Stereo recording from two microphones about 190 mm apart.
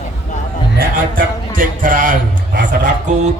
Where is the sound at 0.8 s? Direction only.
45° right (ahead or behind).